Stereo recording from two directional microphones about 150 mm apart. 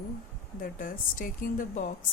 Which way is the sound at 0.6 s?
65° left (ahead or behind).